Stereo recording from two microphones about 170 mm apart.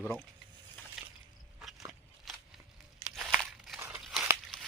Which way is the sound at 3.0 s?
5° right (ahead or behind).